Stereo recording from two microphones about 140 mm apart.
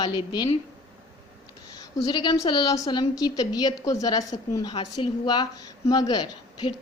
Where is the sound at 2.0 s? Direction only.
30° left (ahead or behind).